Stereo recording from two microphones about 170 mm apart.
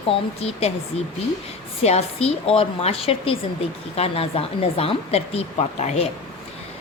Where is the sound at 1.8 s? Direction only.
40° left (ahead or behind).